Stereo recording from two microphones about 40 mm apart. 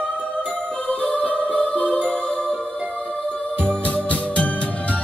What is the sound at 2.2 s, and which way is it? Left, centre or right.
Music, centre.